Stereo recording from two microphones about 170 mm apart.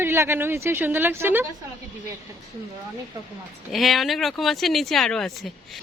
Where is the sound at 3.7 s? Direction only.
Centre (ahead or behind).